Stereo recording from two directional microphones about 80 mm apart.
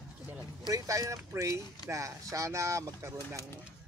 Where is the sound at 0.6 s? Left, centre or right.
Right.